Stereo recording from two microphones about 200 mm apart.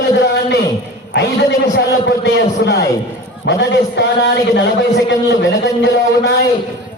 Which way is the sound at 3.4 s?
60° left (ahead or behind).